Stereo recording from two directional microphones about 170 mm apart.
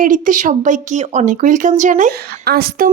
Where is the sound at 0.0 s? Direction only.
50° right (ahead or behind).